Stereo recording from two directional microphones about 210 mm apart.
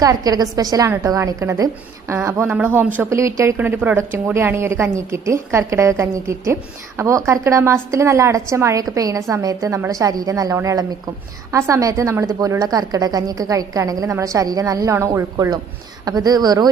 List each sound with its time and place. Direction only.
0.0 s a woman's voice: 15° right (ahead or behind)